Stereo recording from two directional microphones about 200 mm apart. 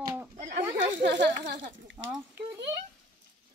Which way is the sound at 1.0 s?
60° right (ahead or behind).